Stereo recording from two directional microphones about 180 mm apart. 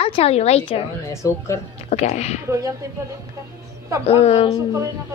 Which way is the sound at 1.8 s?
35° left (ahead or behind).